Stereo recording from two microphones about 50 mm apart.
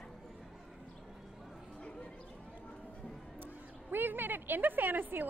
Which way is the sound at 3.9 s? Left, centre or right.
Right.